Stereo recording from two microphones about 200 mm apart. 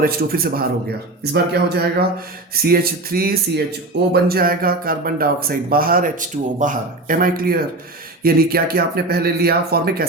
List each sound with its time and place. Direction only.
0.0 s speech: 50° right (ahead or behind)